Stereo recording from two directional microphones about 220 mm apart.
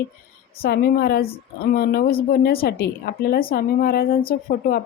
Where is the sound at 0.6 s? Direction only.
45° left (ahead or behind).